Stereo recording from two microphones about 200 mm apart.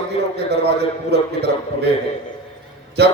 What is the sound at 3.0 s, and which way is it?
Speech, 55° right (ahead or behind).